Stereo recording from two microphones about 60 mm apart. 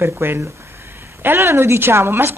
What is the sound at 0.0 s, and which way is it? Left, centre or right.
A woman's voice, right.